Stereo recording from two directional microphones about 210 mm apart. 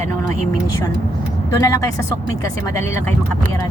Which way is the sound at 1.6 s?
15° left (ahead or behind).